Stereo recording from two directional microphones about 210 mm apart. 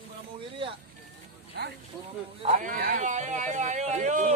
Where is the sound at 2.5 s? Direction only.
40° right (ahead or behind).